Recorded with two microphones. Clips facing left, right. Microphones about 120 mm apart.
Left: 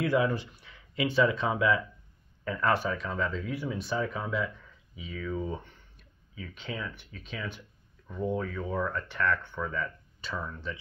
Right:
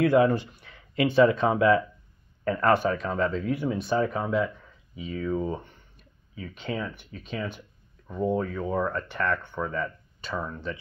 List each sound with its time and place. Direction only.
0.0 s speech: 55° right (ahead or behind)
10.3 s speech: 25° right (ahead or behind)